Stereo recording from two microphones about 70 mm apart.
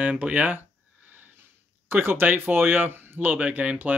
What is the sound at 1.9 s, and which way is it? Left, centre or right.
Speech, right.